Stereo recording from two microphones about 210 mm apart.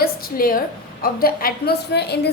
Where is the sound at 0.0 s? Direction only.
45° left (ahead or behind).